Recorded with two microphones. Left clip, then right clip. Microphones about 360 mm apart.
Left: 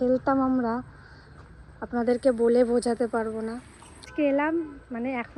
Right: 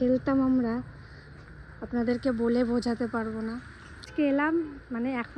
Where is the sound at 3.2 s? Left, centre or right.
Left.